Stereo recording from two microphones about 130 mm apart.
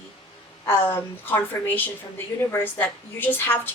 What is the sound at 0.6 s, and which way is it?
A woman's voice, 15° left (ahead or behind).